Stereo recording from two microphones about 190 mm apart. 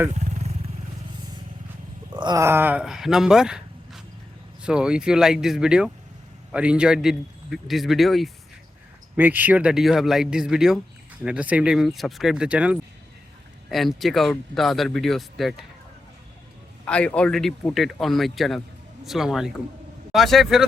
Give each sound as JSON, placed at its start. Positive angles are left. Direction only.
{"t": 0.1, "sound": "vehicle", "side_deg": -35}
{"t": 2.1, "sound": "speech", "side_deg": -20}
{"t": 16.8, "sound": "speech", "side_deg": 5}